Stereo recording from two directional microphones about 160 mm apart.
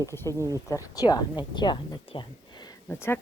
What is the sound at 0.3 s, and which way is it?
Speech, 20° right (ahead or behind).